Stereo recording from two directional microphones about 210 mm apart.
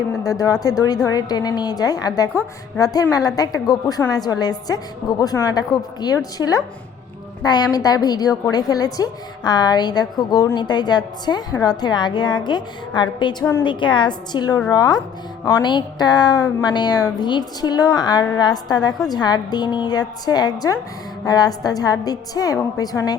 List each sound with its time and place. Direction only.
0.2 s a woman's voice: 15° left (ahead or behind)